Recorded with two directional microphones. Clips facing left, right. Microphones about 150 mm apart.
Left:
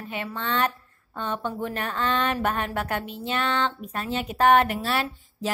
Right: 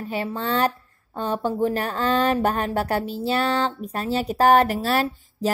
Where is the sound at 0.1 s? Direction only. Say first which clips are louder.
Right 4 dB; 35° right (ahead or behind).